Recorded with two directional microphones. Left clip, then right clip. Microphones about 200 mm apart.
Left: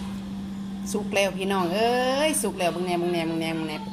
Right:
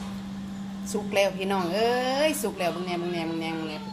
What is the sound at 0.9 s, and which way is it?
A woman's voice, 5° left (ahead or behind).